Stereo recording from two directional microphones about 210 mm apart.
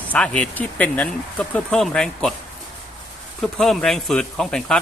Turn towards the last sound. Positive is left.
turn(degrees=5)  # may be behind; listen again after turning